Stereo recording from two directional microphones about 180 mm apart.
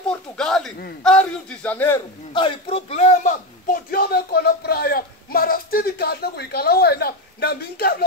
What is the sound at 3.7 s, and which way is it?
Speech, 60° left (ahead or behind).